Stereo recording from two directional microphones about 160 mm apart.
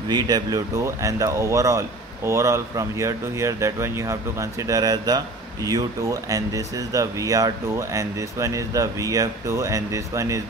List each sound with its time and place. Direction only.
0.1 s speech: 25° right (ahead or behind)